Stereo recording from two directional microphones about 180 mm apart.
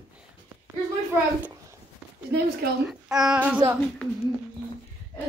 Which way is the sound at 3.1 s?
5° right (ahead or behind).